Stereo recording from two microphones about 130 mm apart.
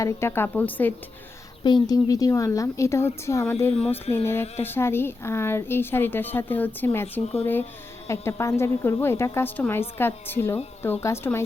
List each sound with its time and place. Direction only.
0.0 s a woman's voice: 20° left (ahead or behind)
1.6 s a woman's voice: 30° left (ahead or behind)